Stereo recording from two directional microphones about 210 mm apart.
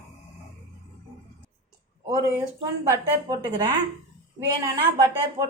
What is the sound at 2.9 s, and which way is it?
Speech, 20° right (ahead or behind).